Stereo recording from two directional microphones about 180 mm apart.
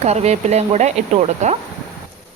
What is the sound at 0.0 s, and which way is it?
Speech, 35° right (ahead or behind).